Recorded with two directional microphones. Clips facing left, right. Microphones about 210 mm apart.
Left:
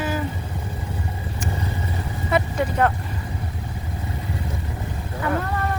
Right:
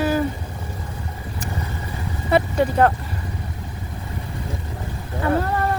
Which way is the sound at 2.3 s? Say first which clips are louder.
Right 4 dB; 35° right (ahead or behind).